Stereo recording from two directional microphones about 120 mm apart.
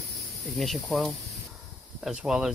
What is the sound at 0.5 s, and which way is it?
Speech, centre (ahead or behind).